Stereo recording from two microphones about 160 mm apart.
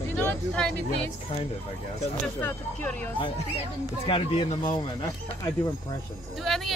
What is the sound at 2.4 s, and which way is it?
Speech, 10° left (ahead or behind).